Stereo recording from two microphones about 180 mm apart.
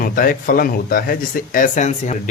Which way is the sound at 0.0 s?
50° left (ahead or behind).